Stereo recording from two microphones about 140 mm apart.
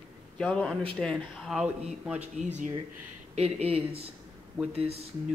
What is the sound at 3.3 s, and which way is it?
Speech, 45° right (ahead or behind).